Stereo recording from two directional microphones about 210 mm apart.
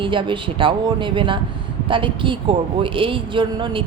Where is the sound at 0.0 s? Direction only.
25° right (ahead or behind).